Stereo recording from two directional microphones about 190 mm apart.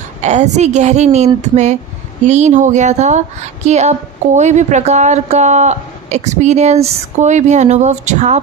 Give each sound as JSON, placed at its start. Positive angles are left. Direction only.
{"t": 0.2, "sound": "a woman's voice", "side_deg": -35}